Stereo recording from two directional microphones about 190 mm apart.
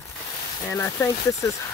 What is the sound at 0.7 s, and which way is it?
Speech, 15° left (ahead or behind).